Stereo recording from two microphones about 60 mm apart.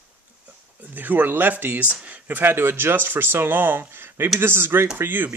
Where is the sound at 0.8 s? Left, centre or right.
Right.